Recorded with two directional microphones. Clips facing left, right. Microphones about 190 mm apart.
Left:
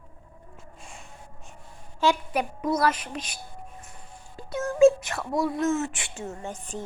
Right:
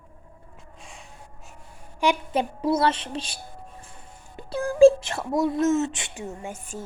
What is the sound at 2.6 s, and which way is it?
Speech, 30° right (ahead or behind).